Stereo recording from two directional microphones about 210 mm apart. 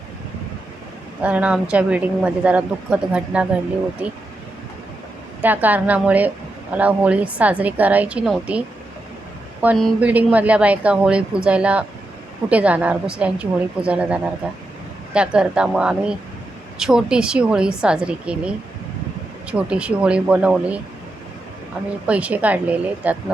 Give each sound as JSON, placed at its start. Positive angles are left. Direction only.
{"t": 1.2, "sound": "a woman's voice", "side_deg": -5}
{"t": 5.4, "sound": "a woman's voice", "side_deg": -10}
{"t": 22.0, "sound": "a woman's voice", "side_deg": -5}